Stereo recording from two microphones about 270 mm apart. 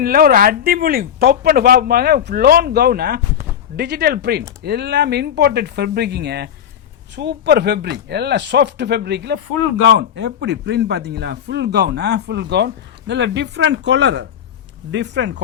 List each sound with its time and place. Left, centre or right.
0.0 s speech: right